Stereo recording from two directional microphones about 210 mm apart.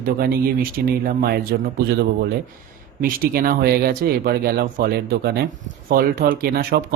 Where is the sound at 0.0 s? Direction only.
45° right (ahead or behind).